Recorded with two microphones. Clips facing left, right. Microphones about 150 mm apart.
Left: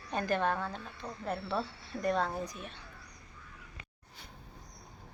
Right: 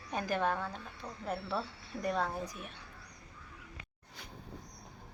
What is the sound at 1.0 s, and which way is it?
Speech, 15° left (ahead or behind).